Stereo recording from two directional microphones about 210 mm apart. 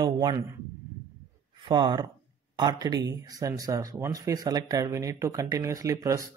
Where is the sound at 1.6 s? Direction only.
25° right (ahead or behind).